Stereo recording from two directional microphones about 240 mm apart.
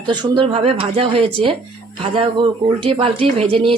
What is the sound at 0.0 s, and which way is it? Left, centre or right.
Speech, centre.